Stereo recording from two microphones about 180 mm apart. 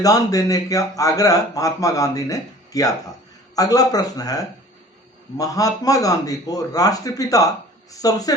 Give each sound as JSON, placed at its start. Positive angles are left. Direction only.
{"t": 0.0, "sound": "a man's voice", "side_deg": 20}